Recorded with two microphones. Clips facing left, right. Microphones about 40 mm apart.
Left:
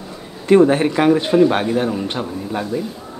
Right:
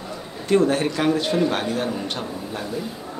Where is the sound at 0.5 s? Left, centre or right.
Left.